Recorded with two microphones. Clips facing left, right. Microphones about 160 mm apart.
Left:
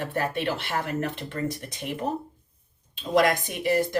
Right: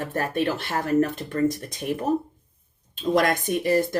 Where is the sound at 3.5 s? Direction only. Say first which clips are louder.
Right 3 dB; 45° right (ahead or behind).